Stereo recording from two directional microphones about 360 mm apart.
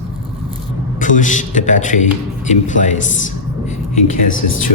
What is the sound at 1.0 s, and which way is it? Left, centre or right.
A man's voice, left.